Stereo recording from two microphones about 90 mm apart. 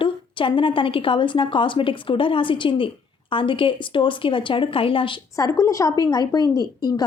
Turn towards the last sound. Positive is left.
turn(degrees=45)  # may be behind; listen again after turning